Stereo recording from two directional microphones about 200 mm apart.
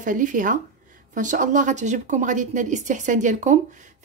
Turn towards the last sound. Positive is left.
turn(degrees=-40)  # may be behind; listen again after turning